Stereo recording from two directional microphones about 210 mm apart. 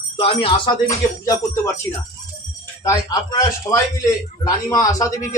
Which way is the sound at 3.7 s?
15° left (ahead or behind).